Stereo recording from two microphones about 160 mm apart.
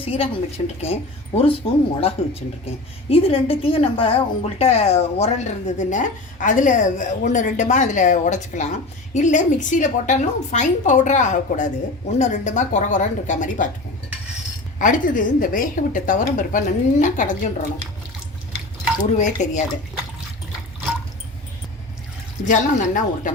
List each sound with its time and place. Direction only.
0.0 s a woman's voice: 35° left (ahead or behind); by 13.7 s 55° left (ahead or behind)
14.8 s a woman's voice: 55° left (ahead or behind)
19.1 s a woman's voice: 50° left (ahead or behind)
22.4 s a woman's voice: 55° left (ahead or behind)